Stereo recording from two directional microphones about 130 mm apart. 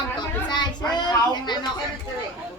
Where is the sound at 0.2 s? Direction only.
35° left (ahead or behind).